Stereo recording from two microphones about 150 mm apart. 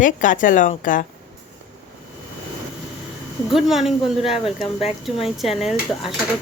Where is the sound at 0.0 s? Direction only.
60° left (ahead or behind).